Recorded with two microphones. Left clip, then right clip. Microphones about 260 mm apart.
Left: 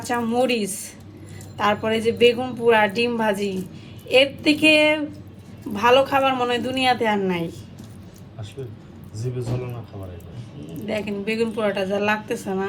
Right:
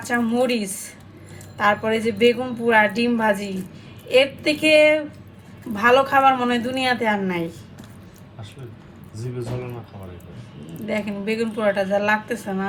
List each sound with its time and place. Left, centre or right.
0.0 s speech: left
10.8 s speech: centre